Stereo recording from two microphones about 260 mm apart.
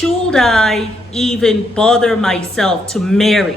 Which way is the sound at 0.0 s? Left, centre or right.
Centre.